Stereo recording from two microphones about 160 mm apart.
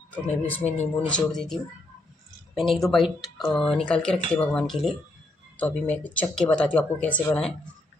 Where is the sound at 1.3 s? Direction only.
Centre (ahead or behind).